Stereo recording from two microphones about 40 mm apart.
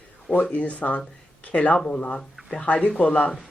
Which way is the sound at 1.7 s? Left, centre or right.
Left.